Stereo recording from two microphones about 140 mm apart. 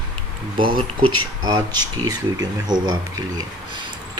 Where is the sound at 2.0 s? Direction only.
30° right (ahead or behind).